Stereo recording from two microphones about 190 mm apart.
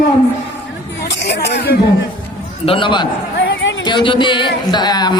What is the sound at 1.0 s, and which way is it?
Speech, 65° left (ahead or behind).